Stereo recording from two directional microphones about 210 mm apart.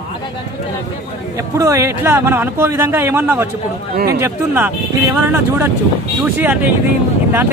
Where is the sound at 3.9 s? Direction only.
45° right (ahead or behind).